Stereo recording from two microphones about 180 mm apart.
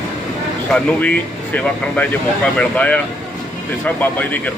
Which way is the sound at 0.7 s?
5° left (ahead or behind).